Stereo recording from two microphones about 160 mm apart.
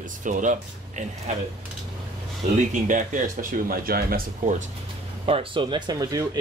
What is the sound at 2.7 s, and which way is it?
Speech, 55° right (ahead or behind).